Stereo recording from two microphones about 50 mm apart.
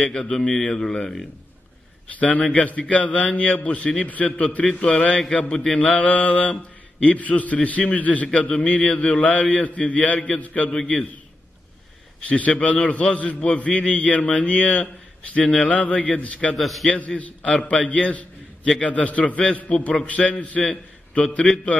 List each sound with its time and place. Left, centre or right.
0.1 s a man's voice: centre
2.1 s a man's voice: left
10.7 s a man's voice: centre
12.3 s a man's voice: left
16.5 s a man's voice: centre
16.9 s a man's voice: left